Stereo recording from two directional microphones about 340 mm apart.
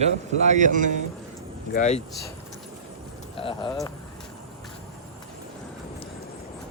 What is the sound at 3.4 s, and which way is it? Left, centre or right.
Speech, centre.